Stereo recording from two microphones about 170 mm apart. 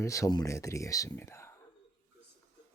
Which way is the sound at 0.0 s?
20° left (ahead or behind).